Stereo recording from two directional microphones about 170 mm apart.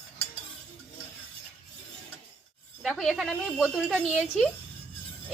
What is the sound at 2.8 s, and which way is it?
Speech, centre (ahead or behind).